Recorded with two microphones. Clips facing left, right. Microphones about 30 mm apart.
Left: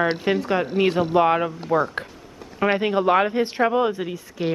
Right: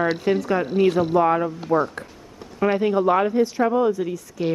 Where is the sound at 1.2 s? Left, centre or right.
Left.